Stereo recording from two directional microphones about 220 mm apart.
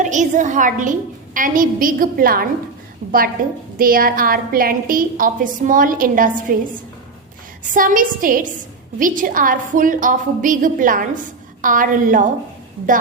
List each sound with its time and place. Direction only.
0.0 s a woman's voice: 35° right (ahead or behind)
7.7 s a woman's voice: 35° right (ahead or behind)